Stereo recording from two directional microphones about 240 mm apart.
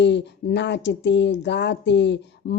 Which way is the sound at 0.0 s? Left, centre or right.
Left.